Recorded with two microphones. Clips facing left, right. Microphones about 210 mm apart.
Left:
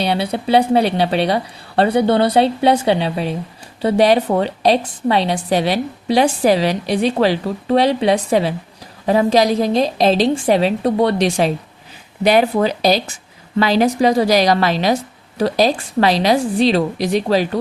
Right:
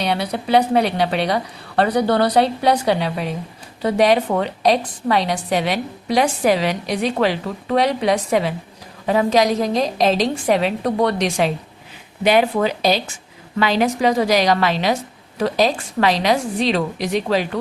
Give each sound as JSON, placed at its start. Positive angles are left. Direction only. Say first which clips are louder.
{"t": 0.0, "sound": "a woman's voice", "louder": "left 3 dB", "side_deg": 30}